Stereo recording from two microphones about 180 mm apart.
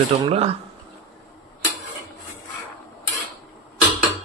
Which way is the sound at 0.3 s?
35° right (ahead or behind).